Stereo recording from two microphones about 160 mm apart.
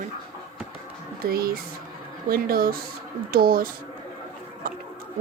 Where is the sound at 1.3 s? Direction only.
70° right (ahead or behind).